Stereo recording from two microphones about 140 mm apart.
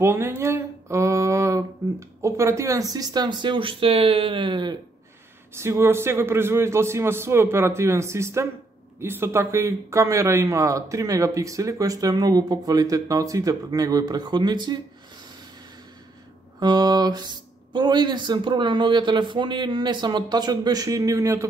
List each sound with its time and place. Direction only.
0.0 s a man's voice: 20° right (ahead or behind); by 4.7 s 35° right (ahead or behind)
5.5 s a man's voice: 20° right (ahead or behind)
16.5 s speech: 30° right (ahead or behind)